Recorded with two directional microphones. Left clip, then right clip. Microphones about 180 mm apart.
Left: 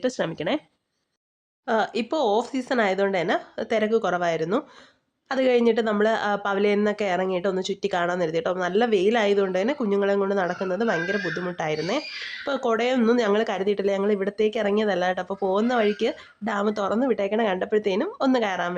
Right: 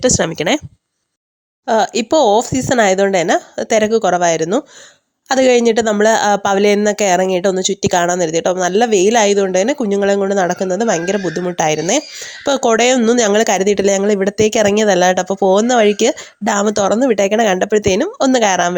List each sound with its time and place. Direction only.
0.0 s speech: 40° right (ahead or behind)
1.6 s a woman's voice: 45° right (ahead or behind)